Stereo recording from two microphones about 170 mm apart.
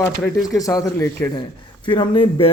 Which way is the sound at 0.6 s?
20° left (ahead or behind).